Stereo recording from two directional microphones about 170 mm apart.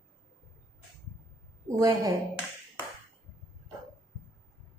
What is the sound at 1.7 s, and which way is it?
Speech, 20° right (ahead or behind).